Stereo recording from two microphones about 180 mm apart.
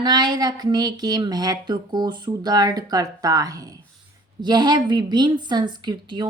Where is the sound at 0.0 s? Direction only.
25° right (ahead or behind).